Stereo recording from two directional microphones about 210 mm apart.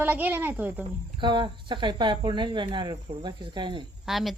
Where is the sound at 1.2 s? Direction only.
20° right (ahead or behind).